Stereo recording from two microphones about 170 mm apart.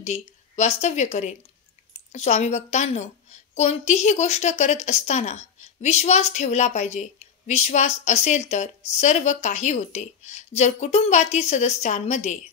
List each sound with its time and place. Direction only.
0.0 s a woman's voice: 40° left (ahead or behind)